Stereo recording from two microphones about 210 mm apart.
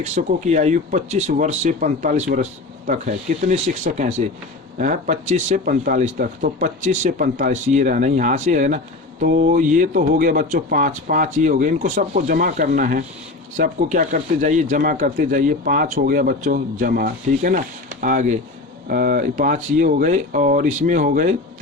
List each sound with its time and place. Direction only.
0.0 s speech: 35° right (ahead or behind)